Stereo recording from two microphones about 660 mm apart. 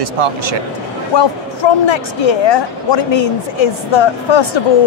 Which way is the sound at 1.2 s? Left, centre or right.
Left.